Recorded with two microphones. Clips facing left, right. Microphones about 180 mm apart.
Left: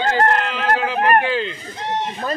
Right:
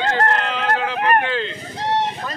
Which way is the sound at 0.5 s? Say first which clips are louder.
Left 2 dB; 5° left (ahead or behind).